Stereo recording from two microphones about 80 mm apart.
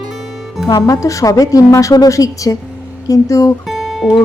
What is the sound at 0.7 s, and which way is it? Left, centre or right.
Speech, left.